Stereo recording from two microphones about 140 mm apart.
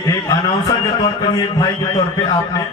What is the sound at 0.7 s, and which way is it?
A man's voice, 30° left (ahead or behind).